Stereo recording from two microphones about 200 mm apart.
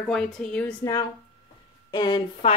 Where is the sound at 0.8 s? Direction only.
20° left (ahead or behind).